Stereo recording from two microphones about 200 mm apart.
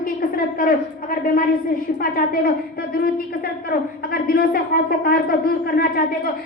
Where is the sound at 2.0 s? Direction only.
45° left (ahead or behind).